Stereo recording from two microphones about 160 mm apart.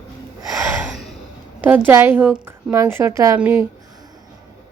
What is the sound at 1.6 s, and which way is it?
A woman's voice, 15° right (ahead or behind).